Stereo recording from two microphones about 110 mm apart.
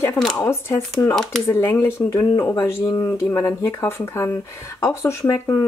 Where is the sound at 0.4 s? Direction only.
25° left (ahead or behind).